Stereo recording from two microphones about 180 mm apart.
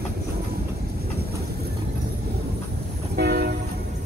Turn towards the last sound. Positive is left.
turn(degrees=-60)  # may be behind; listen again after turning